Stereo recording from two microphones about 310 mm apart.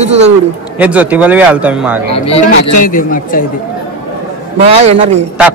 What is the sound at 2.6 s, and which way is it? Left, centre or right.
Speech, left.